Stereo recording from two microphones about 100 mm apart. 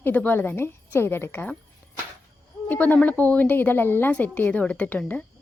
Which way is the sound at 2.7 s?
20° left (ahead or behind).